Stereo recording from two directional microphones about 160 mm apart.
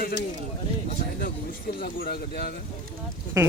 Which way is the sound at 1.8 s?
80° left.